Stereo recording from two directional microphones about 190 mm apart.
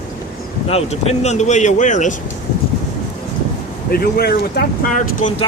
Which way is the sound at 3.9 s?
55° left (ahead or behind).